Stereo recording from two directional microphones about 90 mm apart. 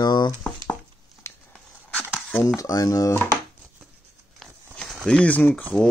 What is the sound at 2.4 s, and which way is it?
Dishes, 45° left (ahead or behind).